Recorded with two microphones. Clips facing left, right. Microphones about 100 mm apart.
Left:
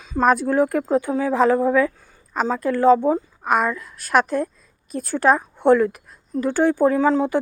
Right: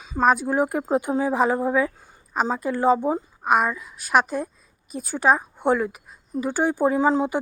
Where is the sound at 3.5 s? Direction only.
10° right (ahead or behind).